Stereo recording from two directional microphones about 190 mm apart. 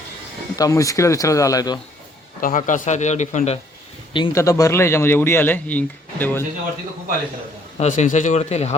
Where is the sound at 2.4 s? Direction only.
45° left (ahead or behind).